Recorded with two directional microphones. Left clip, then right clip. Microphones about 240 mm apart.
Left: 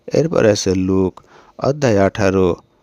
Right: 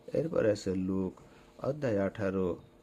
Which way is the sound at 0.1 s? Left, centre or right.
Left.